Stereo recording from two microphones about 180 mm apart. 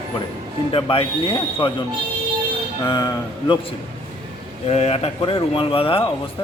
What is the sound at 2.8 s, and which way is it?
Speech, 20° left (ahead or behind).